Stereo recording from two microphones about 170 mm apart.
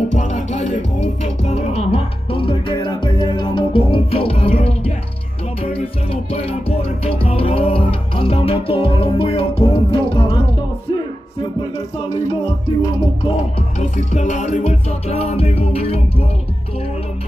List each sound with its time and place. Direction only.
0.2 s music: 45° left (ahead or behind); by 10.3 s 30° left (ahead or behind)
12.8 s music: 35° left (ahead or behind)